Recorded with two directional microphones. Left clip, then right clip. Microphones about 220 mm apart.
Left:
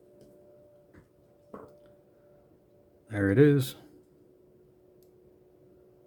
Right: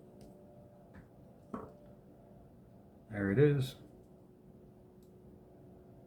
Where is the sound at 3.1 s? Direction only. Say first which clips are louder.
Left 7 dB; 50° left (ahead or behind).